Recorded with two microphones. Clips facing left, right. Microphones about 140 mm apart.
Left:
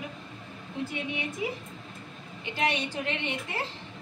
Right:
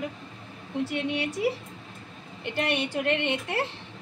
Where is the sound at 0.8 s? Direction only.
75° right (ahead or behind).